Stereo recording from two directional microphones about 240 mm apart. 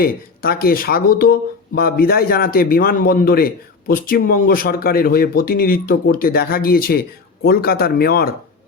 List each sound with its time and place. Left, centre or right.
0.0 s speech: left